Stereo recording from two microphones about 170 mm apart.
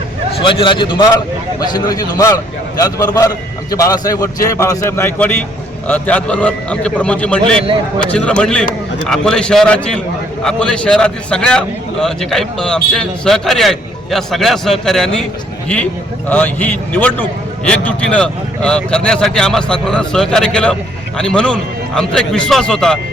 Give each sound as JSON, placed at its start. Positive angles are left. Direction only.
{"t": 0.4, "sound": "a man's voice", "side_deg": 30}
{"t": 16.3, "sound": "a man's voice", "side_deg": 10}